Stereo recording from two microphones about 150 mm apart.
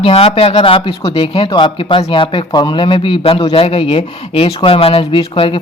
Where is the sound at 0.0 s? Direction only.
40° left (ahead or behind).